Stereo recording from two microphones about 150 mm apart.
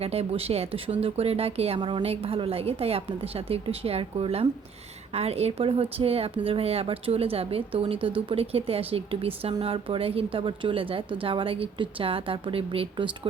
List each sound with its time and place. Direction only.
0.0 s speech: 40° right (ahead or behind)